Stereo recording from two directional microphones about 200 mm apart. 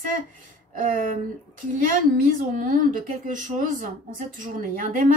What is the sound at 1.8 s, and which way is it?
A woman's voice, 40° right (ahead or behind).